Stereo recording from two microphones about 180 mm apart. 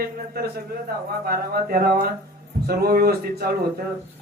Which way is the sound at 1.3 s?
55° right (ahead or behind).